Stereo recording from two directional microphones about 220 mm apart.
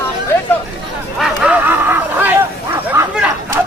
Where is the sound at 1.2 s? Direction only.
5° right (ahead or behind).